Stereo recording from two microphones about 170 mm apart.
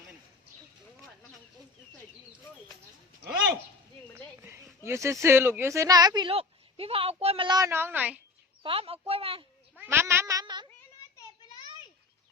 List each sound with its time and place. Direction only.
4.1 s a sound: 15° right (ahead or behind)
4.8 s speech: 15° right (ahead or behind)
8.6 s speech: 35° right (ahead or behind)
9.7 s cat: 10° right (ahead or behind)